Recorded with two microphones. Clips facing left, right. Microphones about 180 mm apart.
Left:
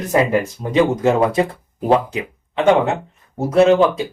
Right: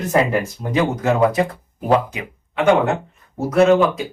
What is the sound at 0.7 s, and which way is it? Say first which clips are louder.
Speech: left 4 dB; 25° left (ahead or behind).